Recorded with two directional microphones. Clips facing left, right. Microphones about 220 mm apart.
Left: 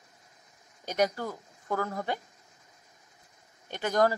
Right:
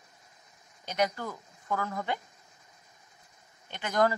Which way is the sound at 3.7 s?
40° left (ahead or behind).